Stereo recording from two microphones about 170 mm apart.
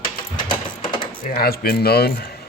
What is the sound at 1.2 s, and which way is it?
Speech, 65° left (ahead or behind).